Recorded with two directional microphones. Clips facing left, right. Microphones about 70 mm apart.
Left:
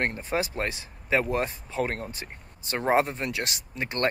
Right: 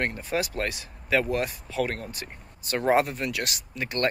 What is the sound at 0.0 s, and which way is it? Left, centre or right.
Speech, left.